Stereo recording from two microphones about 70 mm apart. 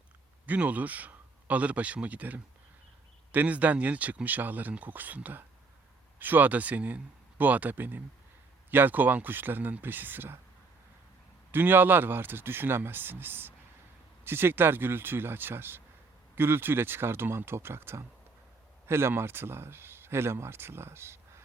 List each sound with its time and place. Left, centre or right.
0.4 s speech: right
11.5 s speech: right